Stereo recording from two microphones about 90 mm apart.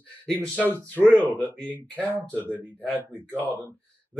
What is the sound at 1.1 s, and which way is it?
Speech, 15° left (ahead or behind).